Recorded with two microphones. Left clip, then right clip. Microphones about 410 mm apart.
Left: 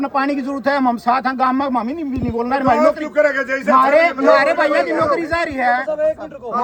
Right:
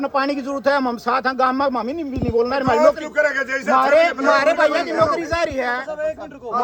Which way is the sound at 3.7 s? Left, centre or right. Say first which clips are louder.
Left 2 dB; centre.